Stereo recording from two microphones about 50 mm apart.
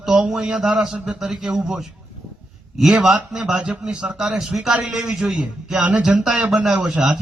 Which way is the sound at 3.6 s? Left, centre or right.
Right.